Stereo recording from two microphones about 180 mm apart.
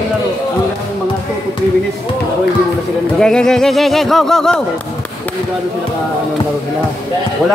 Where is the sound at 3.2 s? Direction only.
5° left (ahead or behind).